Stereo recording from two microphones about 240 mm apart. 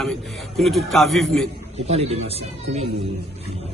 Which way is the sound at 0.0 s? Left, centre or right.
Centre.